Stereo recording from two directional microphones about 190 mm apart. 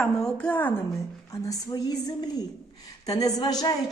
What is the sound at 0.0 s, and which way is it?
Speech, 5° left (ahead or behind).